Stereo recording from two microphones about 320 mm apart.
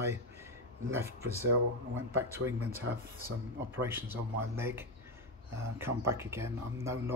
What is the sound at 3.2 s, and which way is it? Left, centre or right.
Speech, centre.